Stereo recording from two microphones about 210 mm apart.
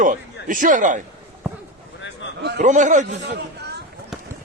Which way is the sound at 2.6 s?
35° right (ahead or behind).